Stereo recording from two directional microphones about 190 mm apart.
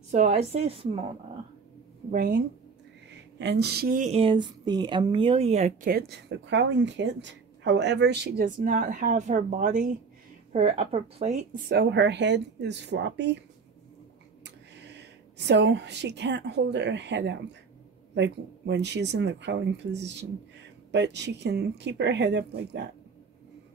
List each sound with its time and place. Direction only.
0.1 s a woman's voice: 35° right (ahead or behind)
2.0 s speech: 50° right (ahead or behind)
3.3 s speech: 65° right (ahead or behind)
8.5 s a woman's voice: 45° right (ahead or behind)
11.7 s speech: 60° right (ahead or behind)
14.4 s speech: 65° right (ahead or behind)